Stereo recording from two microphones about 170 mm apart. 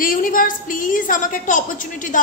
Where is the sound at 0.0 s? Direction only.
55° left (ahead or behind).